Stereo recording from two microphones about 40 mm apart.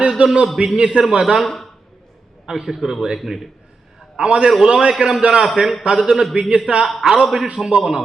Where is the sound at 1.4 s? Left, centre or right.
Centre.